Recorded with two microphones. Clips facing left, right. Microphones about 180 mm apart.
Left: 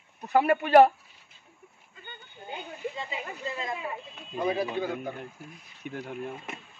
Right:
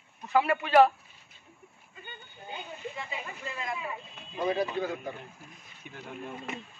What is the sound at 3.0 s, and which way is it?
Speech, 25° left (ahead or behind).